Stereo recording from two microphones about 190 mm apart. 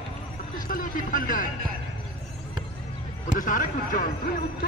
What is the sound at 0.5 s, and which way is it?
Speech, 45° left (ahead or behind).